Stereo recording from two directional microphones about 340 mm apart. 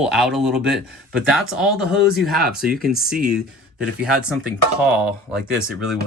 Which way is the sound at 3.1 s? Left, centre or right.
Right.